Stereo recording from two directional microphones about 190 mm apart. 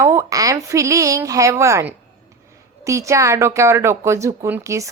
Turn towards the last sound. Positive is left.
turn(degrees=-15)  # may be behind; listen again after turning